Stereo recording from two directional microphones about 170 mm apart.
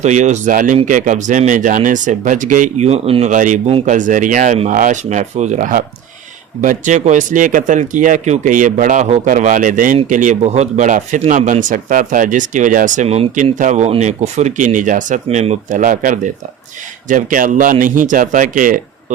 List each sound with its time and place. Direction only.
0.0 s speech: 45° right (ahead or behind)